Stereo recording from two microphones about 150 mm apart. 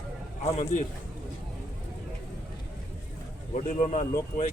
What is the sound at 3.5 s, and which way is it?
Speech, 55° left (ahead or behind).